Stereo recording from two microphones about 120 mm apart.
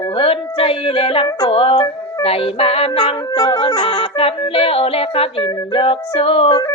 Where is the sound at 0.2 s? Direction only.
50° left (ahead or behind).